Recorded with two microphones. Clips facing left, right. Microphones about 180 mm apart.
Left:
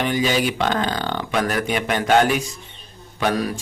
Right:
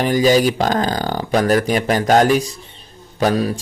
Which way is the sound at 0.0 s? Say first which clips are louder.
Right 6 dB; 40° right (ahead or behind).